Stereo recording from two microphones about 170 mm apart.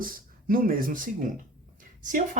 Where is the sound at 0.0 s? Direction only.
55° right (ahead or behind).